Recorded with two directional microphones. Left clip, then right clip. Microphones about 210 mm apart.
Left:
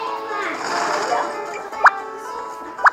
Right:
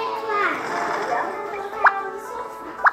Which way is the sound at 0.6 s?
45° left (ahead or behind).